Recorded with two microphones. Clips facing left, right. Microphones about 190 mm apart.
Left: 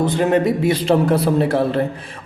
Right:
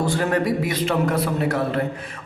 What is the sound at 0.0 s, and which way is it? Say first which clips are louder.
Speech: left 5 dB; 20° left (ahead or behind).